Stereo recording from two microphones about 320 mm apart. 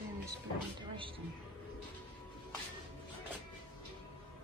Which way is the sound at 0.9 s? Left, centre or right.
Centre.